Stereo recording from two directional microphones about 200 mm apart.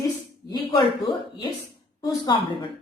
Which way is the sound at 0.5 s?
20° left (ahead or behind).